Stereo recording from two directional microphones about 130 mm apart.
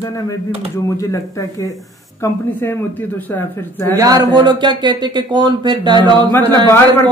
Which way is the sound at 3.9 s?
30° right (ahead or behind).